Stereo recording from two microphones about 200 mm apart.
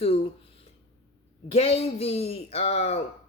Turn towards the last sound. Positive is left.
turn(degrees=30)  # may be behind; listen again after turning